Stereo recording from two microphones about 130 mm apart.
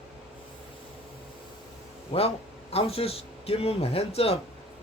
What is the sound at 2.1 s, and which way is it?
A man's voice, 50° left (ahead or behind).